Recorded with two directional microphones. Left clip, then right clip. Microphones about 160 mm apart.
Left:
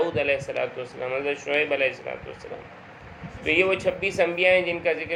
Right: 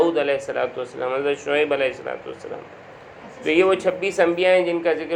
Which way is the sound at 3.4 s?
20° right (ahead or behind).